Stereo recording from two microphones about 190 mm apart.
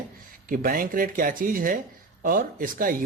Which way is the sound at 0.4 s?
50° right (ahead or behind).